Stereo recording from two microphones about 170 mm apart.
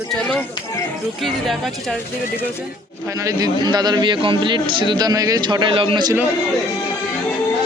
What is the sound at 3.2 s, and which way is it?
Speech, 20° right (ahead or behind).